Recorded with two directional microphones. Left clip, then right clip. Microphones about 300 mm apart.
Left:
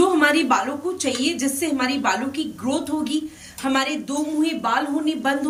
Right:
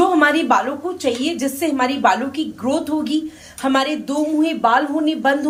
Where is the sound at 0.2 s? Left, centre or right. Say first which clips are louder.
Right 3 dB; centre.